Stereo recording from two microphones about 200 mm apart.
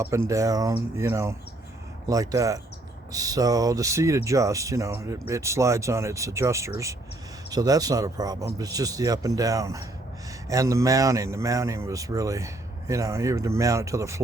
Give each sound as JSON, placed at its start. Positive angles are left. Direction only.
{"t": 0.3, "sound": "speech", "side_deg": -15}